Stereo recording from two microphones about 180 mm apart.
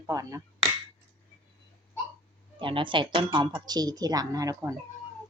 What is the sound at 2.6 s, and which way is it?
Speech, 25° right (ahead or behind).